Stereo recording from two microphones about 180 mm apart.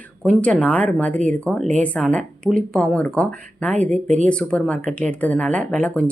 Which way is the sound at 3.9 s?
40° right (ahead or behind).